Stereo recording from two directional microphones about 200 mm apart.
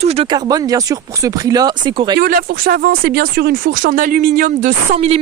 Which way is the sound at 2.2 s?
50° right (ahead or behind).